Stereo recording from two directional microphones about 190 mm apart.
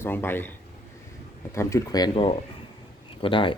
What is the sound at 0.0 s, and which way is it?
Speech, 10° left (ahead or behind).